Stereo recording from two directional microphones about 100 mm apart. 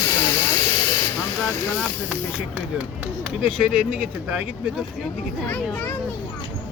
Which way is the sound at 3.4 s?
10° right (ahead or behind).